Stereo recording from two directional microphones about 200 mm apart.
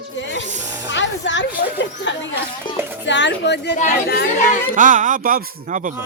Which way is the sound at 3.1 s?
60° left (ahead or behind).